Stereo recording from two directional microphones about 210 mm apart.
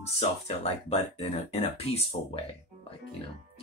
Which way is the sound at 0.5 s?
30° left (ahead or behind).